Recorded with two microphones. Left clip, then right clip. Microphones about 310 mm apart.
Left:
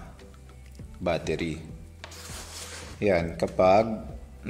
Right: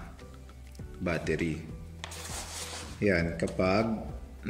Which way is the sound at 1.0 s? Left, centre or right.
Centre.